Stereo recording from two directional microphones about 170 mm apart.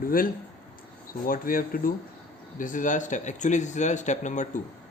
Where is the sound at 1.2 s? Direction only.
55° left (ahead or behind).